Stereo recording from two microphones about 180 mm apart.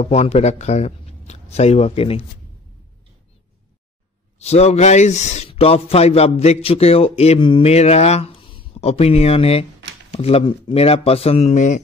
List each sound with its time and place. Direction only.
0.0 s speech: 35° left (ahead or behind)
4.4 s speech: 35° left (ahead or behind)